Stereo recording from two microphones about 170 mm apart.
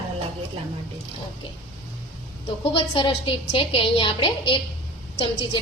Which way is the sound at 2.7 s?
30° left (ahead or behind).